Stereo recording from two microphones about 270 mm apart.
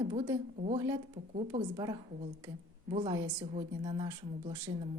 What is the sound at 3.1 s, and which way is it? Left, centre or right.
Speech, centre.